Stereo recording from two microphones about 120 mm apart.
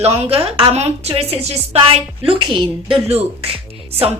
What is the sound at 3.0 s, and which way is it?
Speech, 60° right (ahead or behind).